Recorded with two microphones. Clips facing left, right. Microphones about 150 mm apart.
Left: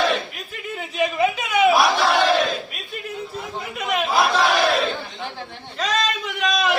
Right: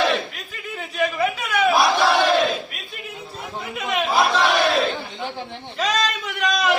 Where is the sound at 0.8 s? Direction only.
15° left (ahead or behind).